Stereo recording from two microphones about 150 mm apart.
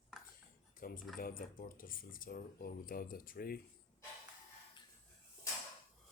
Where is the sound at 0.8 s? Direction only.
75° left (ahead or behind); by 3.6 s 90° left.